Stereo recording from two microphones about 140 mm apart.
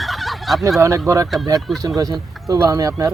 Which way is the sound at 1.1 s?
20° right (ahead or behind).